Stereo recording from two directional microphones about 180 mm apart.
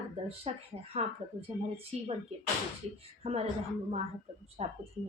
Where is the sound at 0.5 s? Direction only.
35° right (ahead or behind).